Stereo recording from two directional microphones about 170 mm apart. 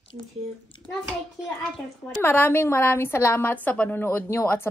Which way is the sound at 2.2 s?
10° left (ahead or behind).